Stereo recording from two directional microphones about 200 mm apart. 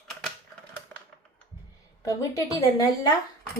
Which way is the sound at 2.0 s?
15° left (ahead or behind).